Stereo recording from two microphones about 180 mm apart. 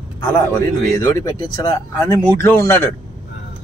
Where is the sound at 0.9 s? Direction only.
20° left (ahead or behind).